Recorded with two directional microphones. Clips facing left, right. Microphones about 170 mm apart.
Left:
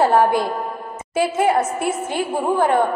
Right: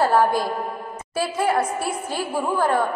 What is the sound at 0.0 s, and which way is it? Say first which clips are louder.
A woman's voice: left 3 dB; 20° left (ahead or behind).